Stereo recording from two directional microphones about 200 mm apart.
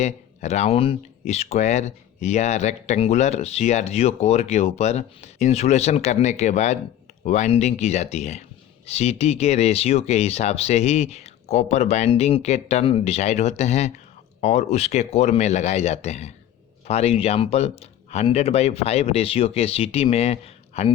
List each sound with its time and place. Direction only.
0.0 s speech: 35° left (ahead or behind)